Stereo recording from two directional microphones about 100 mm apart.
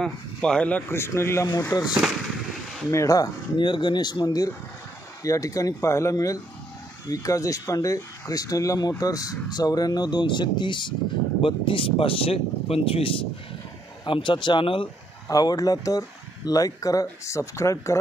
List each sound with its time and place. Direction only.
0.0 s speech: 10° left (ahead or behind); by 1.8 s 25° left (ahead or behind)
2.9 s speech: 35° left (ahead or behind)
3.5 s speech: 50° left (ahead or behind); by 13.1 s 70° left (ahead or behind)
14.0 s speech: 55° left (ahead or behind)
15.2 s speech: 40° left (ahead or behind)